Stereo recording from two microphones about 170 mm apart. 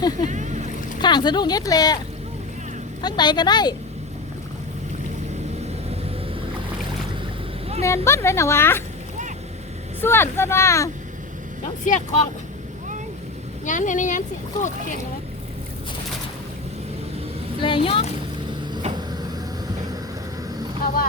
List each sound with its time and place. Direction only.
0.3 s boat: 45° right (ahead or behind)
1.0 s speech: 25° left (ahead or behind)
3.0 s speech: 25° left (ahead or behind)
7.8 s speech: 15° left (ahead or behind)
10.0 s speech: 15° left (ahead or behind)
11.9 s speech: 45° left (ahead or behind)
13.7 s speech: 50° left (ahead or behind)
17.6 s speech: 30° left (ahead or behind)
18.8 s vehicle: 30° right (ahead or behind)